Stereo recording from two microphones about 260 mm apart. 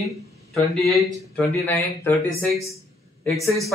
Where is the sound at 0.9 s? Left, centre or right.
Centre.